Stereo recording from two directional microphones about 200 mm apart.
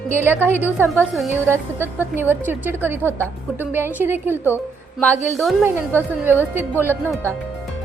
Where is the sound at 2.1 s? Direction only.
10° right (ahead or behind).